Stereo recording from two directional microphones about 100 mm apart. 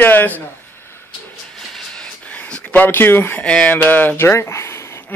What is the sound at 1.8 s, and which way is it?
Speech, 10° left (ahead or behind).